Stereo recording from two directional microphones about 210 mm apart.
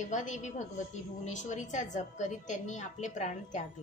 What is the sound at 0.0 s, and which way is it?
A woman's voice, 35° left (ahead or behind).